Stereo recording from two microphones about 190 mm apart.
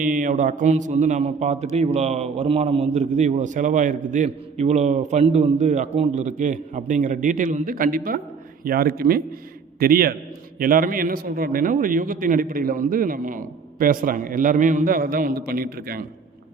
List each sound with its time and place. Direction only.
0.0 s a man's voice: 45° right (ahead or behind)